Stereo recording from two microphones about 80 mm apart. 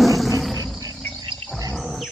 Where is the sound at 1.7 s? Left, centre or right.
Centre.